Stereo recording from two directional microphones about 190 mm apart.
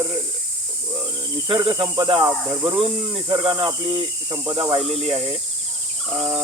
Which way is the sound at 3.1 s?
25° right (ahead or behind).